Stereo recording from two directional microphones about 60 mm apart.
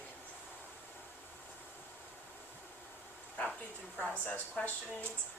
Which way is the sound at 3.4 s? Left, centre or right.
Left.